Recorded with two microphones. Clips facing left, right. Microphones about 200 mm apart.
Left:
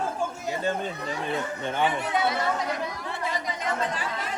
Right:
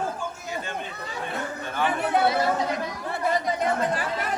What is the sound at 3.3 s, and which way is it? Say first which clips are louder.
Chatter: right 7 dB; 55° right (ahead or behind).